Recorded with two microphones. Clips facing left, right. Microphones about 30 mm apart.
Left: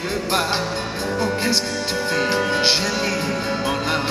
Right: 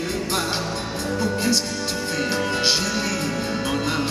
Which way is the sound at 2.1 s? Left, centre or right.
Left.